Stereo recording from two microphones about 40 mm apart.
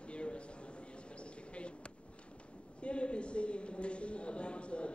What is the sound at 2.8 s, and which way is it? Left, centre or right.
Speech, left.